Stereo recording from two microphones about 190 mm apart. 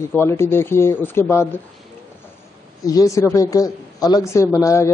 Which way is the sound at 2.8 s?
20° left (ahead or behind).